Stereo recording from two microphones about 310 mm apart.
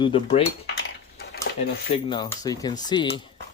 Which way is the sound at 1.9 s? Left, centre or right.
Centre.